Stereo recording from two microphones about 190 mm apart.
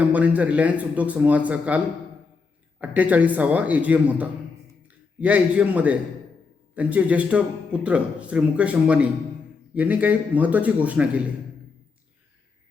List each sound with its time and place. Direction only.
0.1 s speech: 5° right (ahead or behind)
2.8 s speech: 10° right (ahead or behind)